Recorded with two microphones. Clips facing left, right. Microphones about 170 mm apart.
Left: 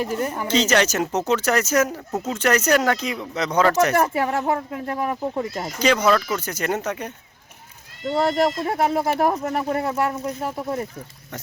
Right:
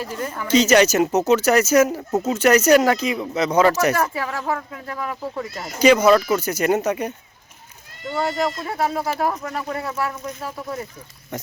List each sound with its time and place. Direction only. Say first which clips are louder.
0.0 s speech: left 4 dB; 15° left (ahead or behind)
0.4 s speech: right 6 dB; 10° right (ahead or behind)
3.9 s speech: left 3 dB; 25° left (ahead or behind)
5.8 s speech: right 5 dB; 10° right (ahead or behind)
8.1 s speech: left 3 dB; 30° left (ahead or behind)